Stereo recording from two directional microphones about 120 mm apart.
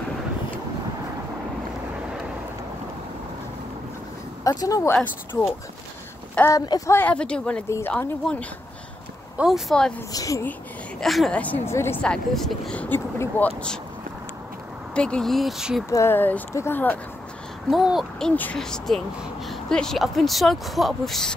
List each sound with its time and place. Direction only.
4.5 s speech: 30° left (ahead or behind)
4.9 s speech: 15° left (ahead or behind)
6.5 s a woman's voice: 35° left (ahead or behind)
6.9 s speech: 15° left (ahead or behind)
10.1 s speech: 30° left (ahead or behind)
11.0 s speech: centre (ahead or behind)
11.3 s speech: 10° left (ahead or behind)
12.0 s speech: 5° left (ahead or behind)
15.0 s speech: 5° left (ahead or behind)
15.9 s speech: 20° left (ahead or behind)
17.6 s speech: centre (ahead or behind)
18.3 s speech: 10° left (ahead or behind)